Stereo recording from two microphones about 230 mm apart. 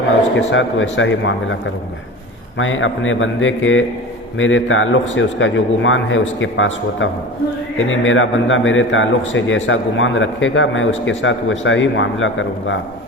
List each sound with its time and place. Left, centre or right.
0.3 s a man's voice: left